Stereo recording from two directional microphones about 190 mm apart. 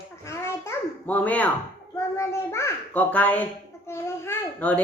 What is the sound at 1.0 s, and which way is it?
A child's voice, 10° left (ahead or behind).